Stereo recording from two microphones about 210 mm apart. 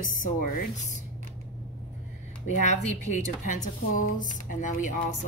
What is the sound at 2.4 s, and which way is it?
Speech, 35° left (ahead or behind).